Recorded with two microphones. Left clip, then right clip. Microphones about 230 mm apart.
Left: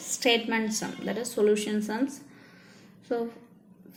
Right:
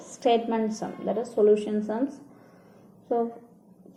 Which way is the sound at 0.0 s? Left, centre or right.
Left.